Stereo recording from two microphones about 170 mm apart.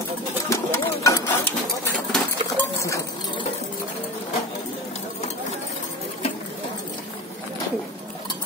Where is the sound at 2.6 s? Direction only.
15° left (ahead or behind).